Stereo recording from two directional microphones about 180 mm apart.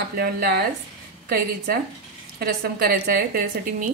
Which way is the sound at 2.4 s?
55° right (ahead or behind).